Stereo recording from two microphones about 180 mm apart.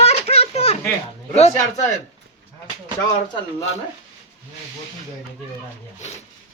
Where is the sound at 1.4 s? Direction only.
35° left (ahead or behind).